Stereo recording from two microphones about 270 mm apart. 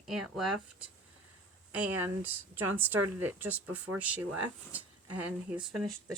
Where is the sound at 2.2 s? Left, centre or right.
Right.